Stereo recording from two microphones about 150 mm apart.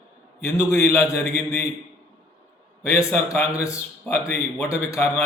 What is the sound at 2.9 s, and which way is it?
A man's voice, 15° left (ahead or behind).